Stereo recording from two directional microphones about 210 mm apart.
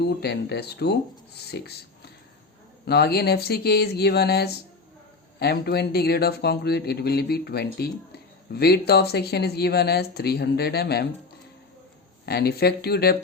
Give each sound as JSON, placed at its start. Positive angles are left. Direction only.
{"t": 0.0, "sound": "speech", "side_deg": 50}
{"t": 2.8, "sound": "speech", "side_deg": 50}
{"t": 12.2, "sound": "speech", "side_deg": 50}